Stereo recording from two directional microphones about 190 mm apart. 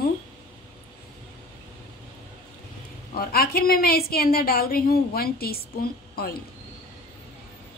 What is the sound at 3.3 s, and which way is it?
A woman's voice, 50° left (ahead or behind).